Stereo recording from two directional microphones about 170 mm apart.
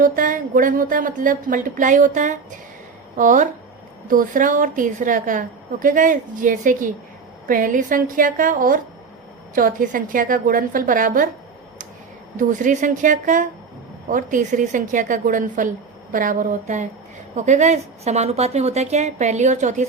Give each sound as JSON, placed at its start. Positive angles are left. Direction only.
{"t": 0.0, "sound": "a woman's voice", "side_deg": -55}
{"t": 12.4, "sound": "a woman's voice", "side_deg": -50}